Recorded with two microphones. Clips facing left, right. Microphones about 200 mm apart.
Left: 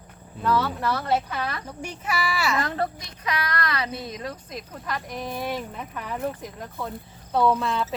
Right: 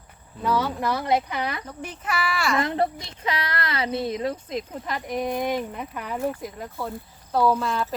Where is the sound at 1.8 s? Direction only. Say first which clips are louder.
Even; 10° left (ahead or behind).